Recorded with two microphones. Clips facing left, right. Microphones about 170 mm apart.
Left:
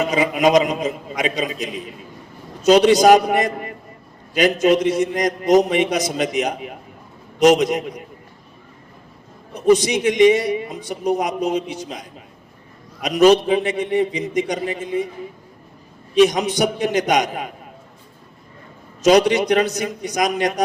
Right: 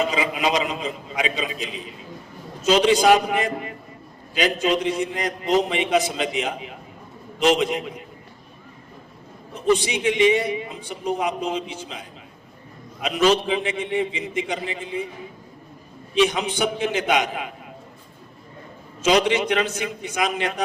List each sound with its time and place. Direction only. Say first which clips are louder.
0.0 s a man's voice: left 5 dB; 45° left (ahead or behind)
9.7 s a man's voice: left 5 dB; 40° left (ahead or behind)
16.1 s a man's voice: left 5 dB; 40° left (ahead or behind)
19.0 s a man's voice: left 5 dB; 40° left (ahead or behind)